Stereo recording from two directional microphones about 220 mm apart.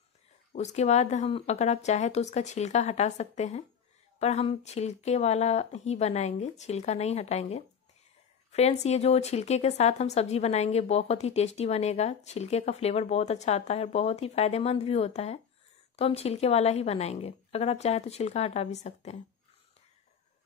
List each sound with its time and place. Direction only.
0.5 s a woman's voice: 30° left (ahead or behind)